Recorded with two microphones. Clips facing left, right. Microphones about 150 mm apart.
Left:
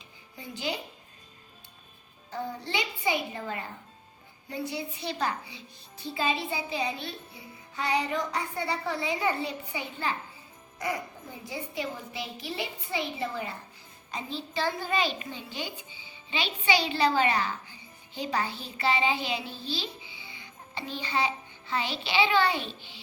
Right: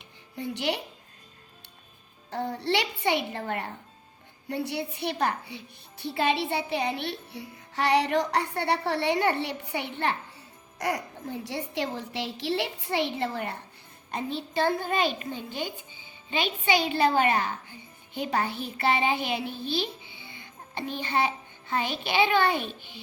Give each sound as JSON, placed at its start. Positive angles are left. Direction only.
{"t": 0.0, "sound": "music", "side_deg": -65}
{"t": 2.3, "sound": "a child's voice", "side_deg": -65}
{"t": 14.1, "sound": "a child's voice", "side_deg": -60}